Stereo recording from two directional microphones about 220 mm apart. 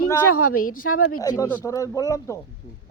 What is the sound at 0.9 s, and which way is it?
Speech, 80° left.